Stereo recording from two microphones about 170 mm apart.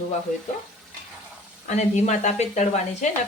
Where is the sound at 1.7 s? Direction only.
40° left (ahead or behind).